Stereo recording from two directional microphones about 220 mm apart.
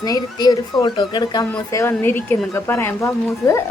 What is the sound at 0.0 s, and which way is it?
A woman's voice, 15° left (ahead or behind).